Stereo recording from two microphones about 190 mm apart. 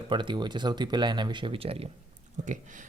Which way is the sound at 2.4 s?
40° right (ahead or behind).